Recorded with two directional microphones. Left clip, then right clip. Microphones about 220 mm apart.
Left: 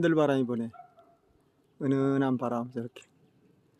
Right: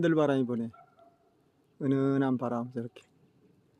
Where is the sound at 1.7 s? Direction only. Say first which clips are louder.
Left 1 dB; 5° left (ahead or behind).